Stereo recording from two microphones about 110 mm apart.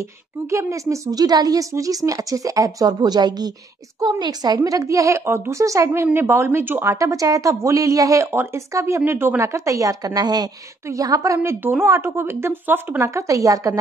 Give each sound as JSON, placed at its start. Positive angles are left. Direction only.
{"t": 0.0, "sound": "a woman's voice", "side_deg": -25}